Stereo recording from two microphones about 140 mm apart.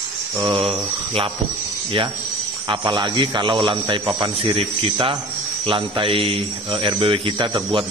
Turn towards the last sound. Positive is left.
turn(degrees=-35)  # may be behind; listen again after turning